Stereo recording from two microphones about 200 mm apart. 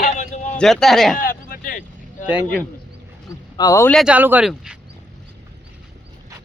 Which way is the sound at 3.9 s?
5° right (ahead or behind).